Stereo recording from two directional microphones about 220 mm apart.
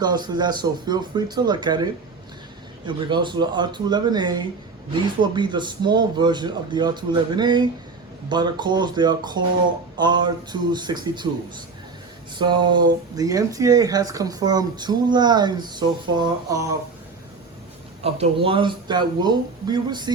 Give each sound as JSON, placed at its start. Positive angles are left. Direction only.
{"t": 0.0, "sound": "speech", "side_deg": -20}
{"t": 12.4, "sound": "speech", "side_deg": -20}
{"t": 18.0, "sound": "speech", "side_deg": -25}